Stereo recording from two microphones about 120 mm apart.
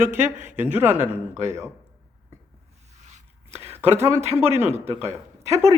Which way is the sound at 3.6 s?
20° right (ahead or behind).